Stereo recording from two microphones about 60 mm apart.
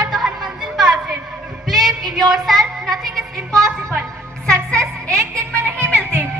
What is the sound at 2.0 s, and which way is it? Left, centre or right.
Child singing, right.